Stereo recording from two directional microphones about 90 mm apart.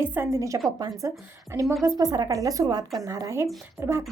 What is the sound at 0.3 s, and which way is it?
Speech, 35° right (ahead or behind).